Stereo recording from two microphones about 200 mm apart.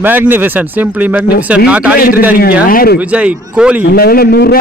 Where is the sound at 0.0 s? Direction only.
10° right (ahead or behind).